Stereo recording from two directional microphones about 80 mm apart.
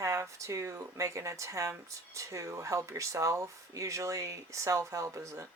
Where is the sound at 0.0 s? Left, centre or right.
Right.